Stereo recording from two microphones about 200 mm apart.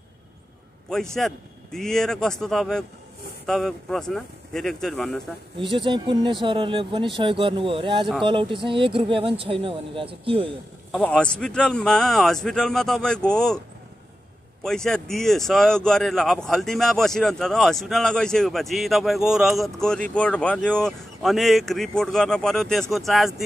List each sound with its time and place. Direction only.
1.1 s speech: centre (ahead or behind)
5.6 s speech: 25° right (ahead or behind)
10.9 s speech: 5° left (ahead or behind)
14.6 s speech: 5° left (ahead or behind)